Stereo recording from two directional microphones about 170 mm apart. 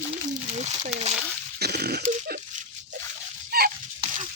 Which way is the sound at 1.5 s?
70° right (ahead or behind).